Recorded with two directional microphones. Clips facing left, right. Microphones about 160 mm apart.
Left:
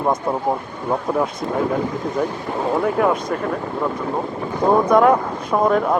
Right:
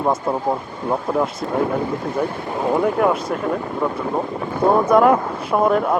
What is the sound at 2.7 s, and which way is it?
Speech, centre (ahead or behind).